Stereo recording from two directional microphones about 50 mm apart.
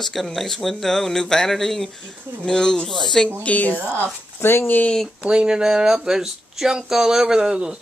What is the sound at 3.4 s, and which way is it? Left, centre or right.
Speech, left.